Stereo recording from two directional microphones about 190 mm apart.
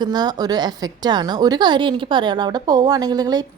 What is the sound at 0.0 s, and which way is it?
A woman's voice, 20° right (ahead or behind).